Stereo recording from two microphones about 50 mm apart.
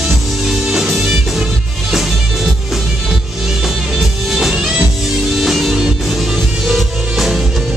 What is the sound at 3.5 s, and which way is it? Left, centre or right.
Music, centre.